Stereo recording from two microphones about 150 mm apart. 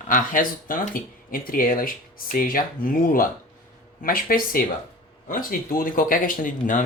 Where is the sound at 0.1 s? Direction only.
60° left (ahead or behind).